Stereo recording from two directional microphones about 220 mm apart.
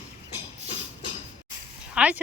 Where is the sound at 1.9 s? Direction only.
5° right (ahead or behind).